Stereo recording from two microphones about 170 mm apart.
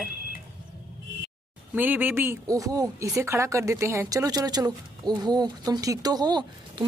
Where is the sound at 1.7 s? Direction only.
10° right (ahead or behind).